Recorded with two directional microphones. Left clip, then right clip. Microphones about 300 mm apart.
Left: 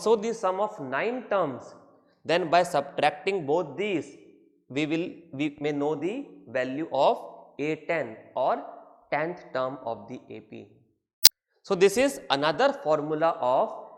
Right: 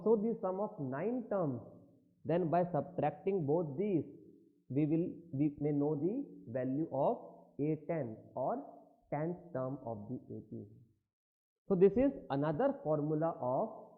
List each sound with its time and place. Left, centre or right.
0.2 s speech: centre
3.4 s speech: centre
6.9 s speech: left
7.6 s speech: centre
11.7 s speech: centre